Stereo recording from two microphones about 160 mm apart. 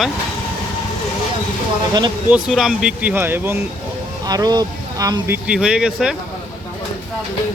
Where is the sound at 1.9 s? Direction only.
25° right (ahead or behind).